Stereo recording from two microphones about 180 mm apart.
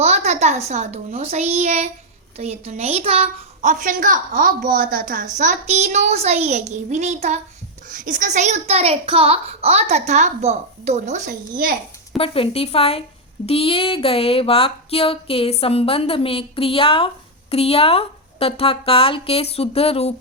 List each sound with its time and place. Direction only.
0.0 s a child's voice: 40° right (ahead or behind)
12.1 s a woman's voice: 30° left (ahead or behind)